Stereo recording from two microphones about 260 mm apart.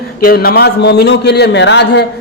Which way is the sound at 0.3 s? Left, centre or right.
Left.